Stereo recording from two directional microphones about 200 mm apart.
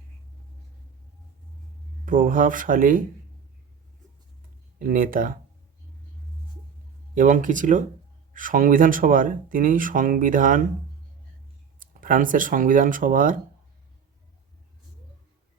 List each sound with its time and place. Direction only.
2.0 s speech: 40° right (ahead or behind)
4.8 s speech: 45° right (ahead or behind)
7.1 s speech: 40° right (ahead or behind)
11.8 s speech: 40° right (ahead or behind)